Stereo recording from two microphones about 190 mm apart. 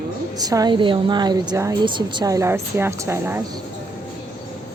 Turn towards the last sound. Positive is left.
turn(degrees=-15)  # may be behind; listen again after turning